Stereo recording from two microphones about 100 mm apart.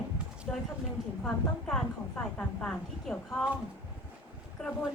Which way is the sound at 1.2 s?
5° left (ahead or behind).